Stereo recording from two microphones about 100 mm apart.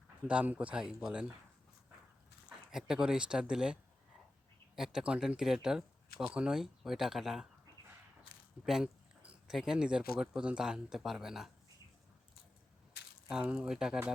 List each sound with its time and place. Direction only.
0.3 s speech: 15° right (ahead or behind)
2.7 s speech: 5° right (ahead or behind)
8.6 s speech: 5° right (ahead or behind)
13.2 s speech: 10° right (ahead or behind)